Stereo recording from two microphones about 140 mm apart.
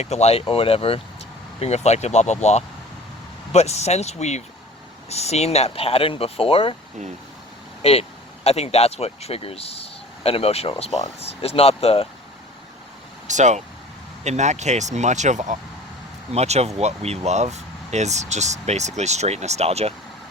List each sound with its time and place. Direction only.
0.0 s speech: 50° left (ahead or behind)
7.8 s speech: 45° left (ahead or behind)
13.2 s speech: 60° right (ahead or behind)